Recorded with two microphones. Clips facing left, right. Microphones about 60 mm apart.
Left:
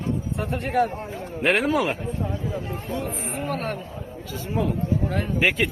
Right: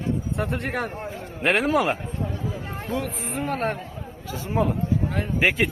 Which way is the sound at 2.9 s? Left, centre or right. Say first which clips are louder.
Right 2 dB; right.